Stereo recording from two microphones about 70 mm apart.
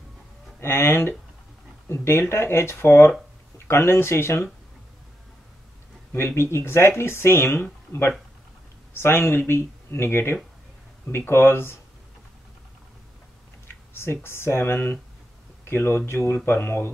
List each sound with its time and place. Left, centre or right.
0.6 s speech: left
6.1 s speech: left
8.9 s speech: left
13.9 s speech: left